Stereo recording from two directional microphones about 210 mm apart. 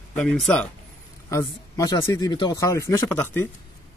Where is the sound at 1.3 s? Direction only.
15° left (ahead or behind).